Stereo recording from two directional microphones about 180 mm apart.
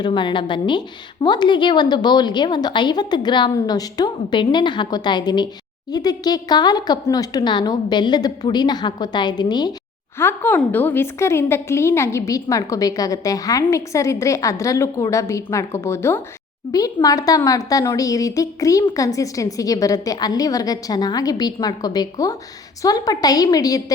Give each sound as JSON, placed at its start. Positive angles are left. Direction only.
{"t": 0.0, "sound": "a woman's voice", "side_deg": 25}
{"t": 10.2, "sound": "a woman's voice", "side_deg": 10}